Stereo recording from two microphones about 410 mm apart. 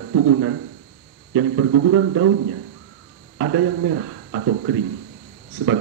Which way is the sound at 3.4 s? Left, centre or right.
Right.